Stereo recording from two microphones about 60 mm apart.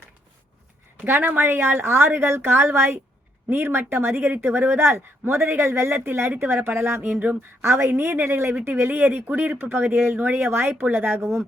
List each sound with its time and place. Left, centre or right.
1.0 s speech: right
4.8 s a woman's voice: right
8.7 s speech: right